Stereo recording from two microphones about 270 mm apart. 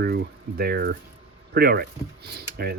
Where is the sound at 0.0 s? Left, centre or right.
Right.